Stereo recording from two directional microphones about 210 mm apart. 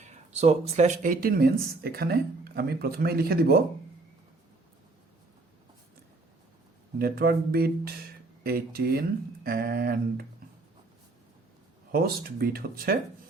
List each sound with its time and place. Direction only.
0.0 s speech: 30° right (ahead or behind); by 3.6 s 50° right (ahead or behind)
7.0 s speech: 50° right (ahead or behind)
11.9 s speech: 45° right (ahead or behind)